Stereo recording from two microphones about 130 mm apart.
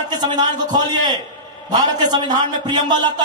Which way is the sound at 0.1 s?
30° right (ahead or behind).